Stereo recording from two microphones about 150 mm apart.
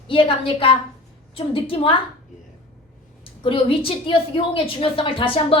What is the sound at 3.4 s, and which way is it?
A woman's voice, 35° left (ahead or behind).